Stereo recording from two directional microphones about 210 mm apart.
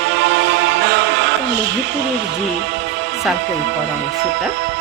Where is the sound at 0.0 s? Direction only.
55° right (ahead or behind).